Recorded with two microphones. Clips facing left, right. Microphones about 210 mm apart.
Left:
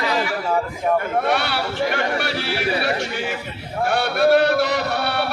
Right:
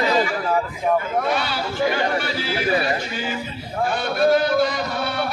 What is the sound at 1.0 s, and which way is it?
Speech, 70° left (ahead or behind).